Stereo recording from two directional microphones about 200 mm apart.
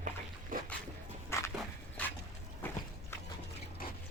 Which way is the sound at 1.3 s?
15° left (ahead or behind).